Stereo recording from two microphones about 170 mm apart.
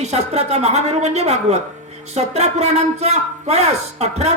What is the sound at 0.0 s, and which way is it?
Speech, 40° right (ahead or behind).